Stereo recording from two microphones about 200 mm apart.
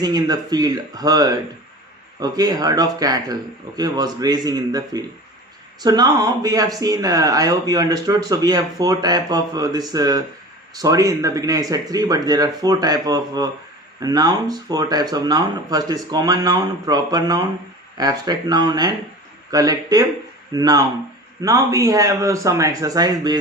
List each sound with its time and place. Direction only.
0.0 s speech: 20° right (ahead or behind)